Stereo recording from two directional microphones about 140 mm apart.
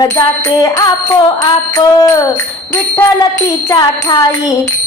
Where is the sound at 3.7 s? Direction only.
30° left (ahead or behind).